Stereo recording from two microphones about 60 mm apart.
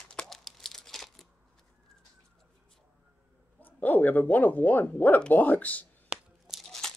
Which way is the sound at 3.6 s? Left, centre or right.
Left.